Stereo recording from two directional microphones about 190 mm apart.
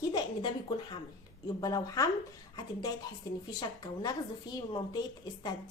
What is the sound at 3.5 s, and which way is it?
A woman's voice, 20° left (ahead or behind).